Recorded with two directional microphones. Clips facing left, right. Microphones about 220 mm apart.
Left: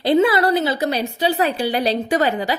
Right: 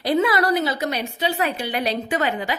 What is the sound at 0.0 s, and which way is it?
A woman's voice, 25° left (ahead or behind).